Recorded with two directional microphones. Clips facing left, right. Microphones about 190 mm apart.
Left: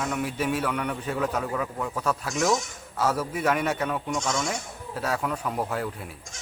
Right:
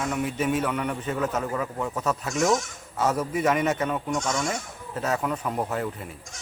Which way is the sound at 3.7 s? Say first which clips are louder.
Right 2 dB; 5° right (ahead or behind).